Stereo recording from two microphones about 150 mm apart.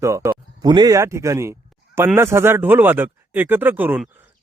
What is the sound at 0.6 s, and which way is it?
Speech, 30° right (ahead or behind).